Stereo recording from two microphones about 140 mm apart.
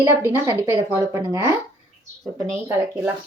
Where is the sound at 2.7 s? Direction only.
20° right (ahead or behind).